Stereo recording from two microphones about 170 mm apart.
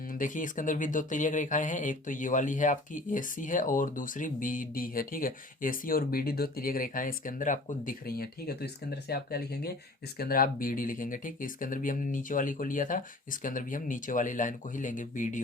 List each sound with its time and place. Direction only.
0.1 s speech: 50° left (ahead or behind)